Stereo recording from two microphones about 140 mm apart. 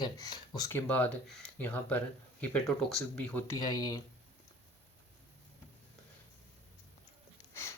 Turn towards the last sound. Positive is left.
turn(degrees=20)  # may be behind; listen again after turning